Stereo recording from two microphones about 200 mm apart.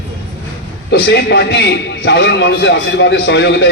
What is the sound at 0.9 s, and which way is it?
A man's voice, 55° left (ahead or behind).